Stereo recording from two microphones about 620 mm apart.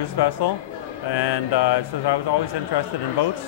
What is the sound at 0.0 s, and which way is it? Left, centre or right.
A man's voice, left.